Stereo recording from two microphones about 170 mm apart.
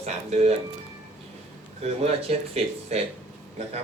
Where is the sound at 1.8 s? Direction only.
35° right (ahead or behind).